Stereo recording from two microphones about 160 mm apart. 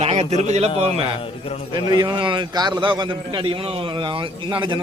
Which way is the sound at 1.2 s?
35° left (ahead or behind).